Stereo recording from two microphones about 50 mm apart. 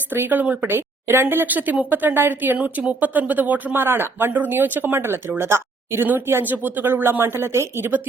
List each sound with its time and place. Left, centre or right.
0.1 s speech: right
0.7 s speech: right
3.8 s speech: right